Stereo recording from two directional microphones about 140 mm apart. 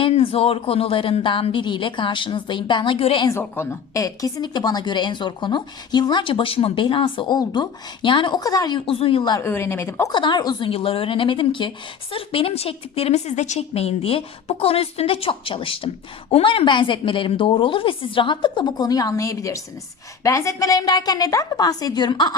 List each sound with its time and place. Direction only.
0.0 s a woman's voice: 40° left (ahead or behind)
3.2 s a woman's voice: 15° left (ahead or behind)
8.9 s a woman's voice: 40° left (ahead or behind)
9.4 s a woman's voice: 15° left (ahead or behind)
10.1 s a woman's voice: 35° left (ahead or behind)
10.7 s a woman's voice: 40° left (ahead or behind)